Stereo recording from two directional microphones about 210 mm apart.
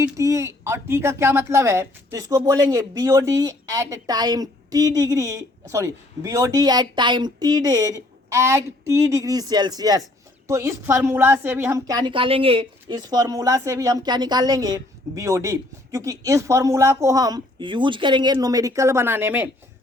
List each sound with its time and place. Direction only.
0.2 s a woman's voice: 15° right (ahead or behind)